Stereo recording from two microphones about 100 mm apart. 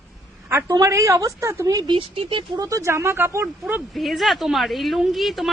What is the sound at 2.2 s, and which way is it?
Speech, 60° right (ahead or behind).